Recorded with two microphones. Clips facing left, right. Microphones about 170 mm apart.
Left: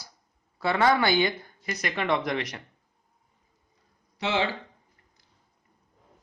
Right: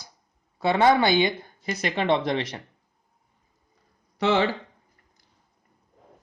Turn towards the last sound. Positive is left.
turn(degrees=-55)  # may be behind; listen again after turning